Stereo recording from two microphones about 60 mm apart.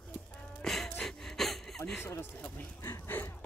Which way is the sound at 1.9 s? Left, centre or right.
Left.